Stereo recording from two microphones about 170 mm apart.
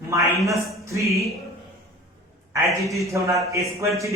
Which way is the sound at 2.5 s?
20° right (ahead or behind).